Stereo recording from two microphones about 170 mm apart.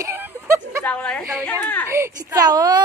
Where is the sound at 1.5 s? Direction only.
10° left (ahead or behind).